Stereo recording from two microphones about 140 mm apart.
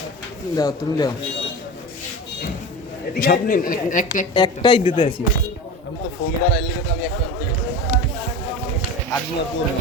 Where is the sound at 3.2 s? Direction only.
85° left; by 4.2 s 65° left (ahead or behind).